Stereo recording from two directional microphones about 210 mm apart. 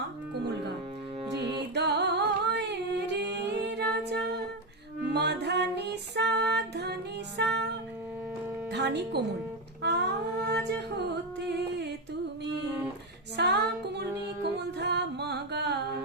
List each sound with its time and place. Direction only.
1.4 s music: 50° right (ahead or behind)
8.7 s speech: 55° right (ahead or behind)
9.8 s humming: 55° right (ahead or behind)
13.3 s music: 50° right (ahead or behind)